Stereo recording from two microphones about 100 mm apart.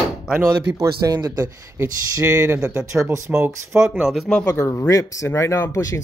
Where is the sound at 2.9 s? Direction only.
30° right (ahead or behind).